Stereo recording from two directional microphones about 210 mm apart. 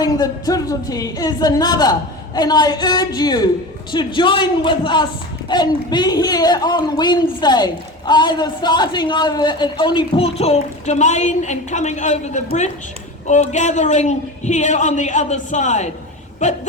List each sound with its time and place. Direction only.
0.0 s a man's voice: 15° left (ahead or behind); by 16.6 s 35° left (ahead or behind)